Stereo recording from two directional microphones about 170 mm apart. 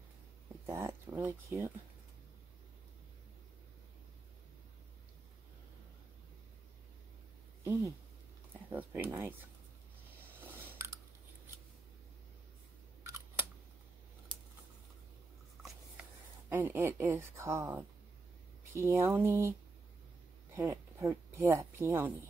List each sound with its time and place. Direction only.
0.7 s a woman's voice: 15° right (ahead or behind)
7.6 s a sound: 15° right (ahead or behind)
8.7 s a woman's voice: 10° right (ahead or behind)
10.4 s a sound: 10° right (ahead or behind)
16.4 s a woman's voice: 15° right (ahead or behind)
20.5 s speech: 15° right (ahead or behind)